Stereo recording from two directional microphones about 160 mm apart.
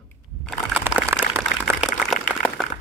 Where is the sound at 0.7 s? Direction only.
10° right (ahead or behind).